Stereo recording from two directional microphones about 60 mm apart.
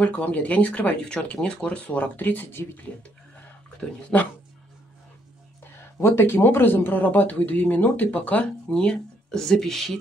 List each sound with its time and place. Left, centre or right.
0.0 s speech: left
4.1 s speech: left
5.6 s speech: left; by 9.9 s centre